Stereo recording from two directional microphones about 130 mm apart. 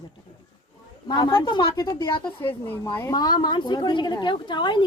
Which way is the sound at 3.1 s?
35° left (ahead or behind).